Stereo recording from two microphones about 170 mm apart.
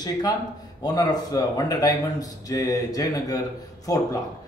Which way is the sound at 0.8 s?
20° left (ahead or behind).